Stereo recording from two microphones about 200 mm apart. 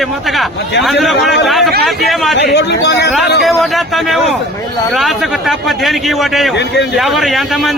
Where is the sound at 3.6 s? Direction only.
Centre (ahead or behind).